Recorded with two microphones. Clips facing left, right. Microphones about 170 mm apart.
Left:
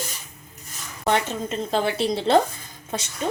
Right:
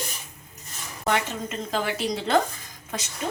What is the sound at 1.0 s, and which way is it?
A woman's voice, 30° left (ahead or behind).